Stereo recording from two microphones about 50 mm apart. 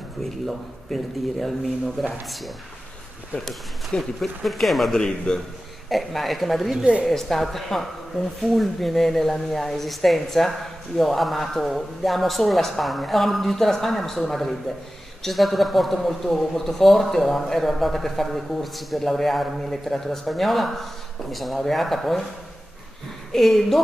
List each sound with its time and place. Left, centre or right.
0.2 s speech: centre
4.9 s a man's voice: centre
5.9 s speech: centre
6.7 s a woman's voice: centre
7.1 s speech: centre
23.3 s speech: centre